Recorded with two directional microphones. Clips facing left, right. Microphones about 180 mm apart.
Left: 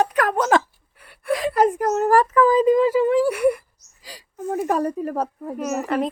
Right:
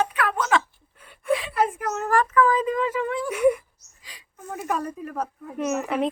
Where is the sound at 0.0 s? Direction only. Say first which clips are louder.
Left 5 dB; 40° left (ahead or behind).